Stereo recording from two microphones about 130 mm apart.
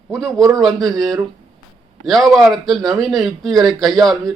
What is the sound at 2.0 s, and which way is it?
A man's voice, centre (ahead or behind).